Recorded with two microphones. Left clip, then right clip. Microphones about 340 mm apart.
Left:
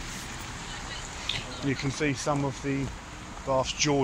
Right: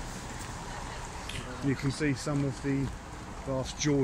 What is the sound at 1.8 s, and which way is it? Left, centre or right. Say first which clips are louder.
Speech: left 4 dB; centre.